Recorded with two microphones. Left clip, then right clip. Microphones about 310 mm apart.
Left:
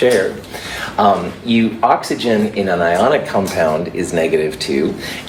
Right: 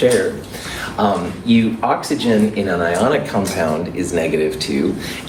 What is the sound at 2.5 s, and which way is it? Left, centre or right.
Speech, left.